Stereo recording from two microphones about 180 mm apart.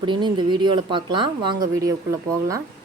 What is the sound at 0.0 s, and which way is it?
A woman's voice, 25° right (ahead or behind).